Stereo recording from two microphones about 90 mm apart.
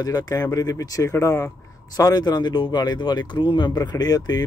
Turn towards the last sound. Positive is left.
turn(degrees=50)  # may be behind; listen again after turning